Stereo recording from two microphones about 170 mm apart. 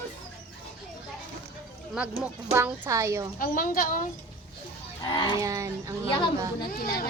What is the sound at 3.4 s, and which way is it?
Speech, 55° left (ahead or behind).